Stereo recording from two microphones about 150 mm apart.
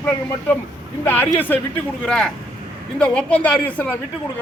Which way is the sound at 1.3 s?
10° left (ahead or behind).